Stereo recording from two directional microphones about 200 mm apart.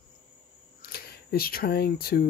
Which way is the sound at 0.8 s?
50° left (ahead or behind).